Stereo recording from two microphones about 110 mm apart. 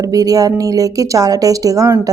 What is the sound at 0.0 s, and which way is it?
A woman's voice, 35° right (ahead or behind).